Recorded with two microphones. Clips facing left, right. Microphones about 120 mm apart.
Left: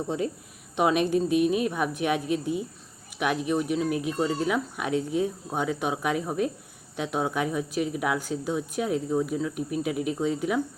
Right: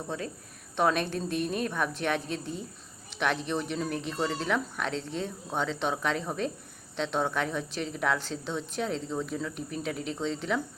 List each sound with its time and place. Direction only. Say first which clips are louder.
0.1 s a woman's voice: left 7 dB; 15° left (ahead or behind)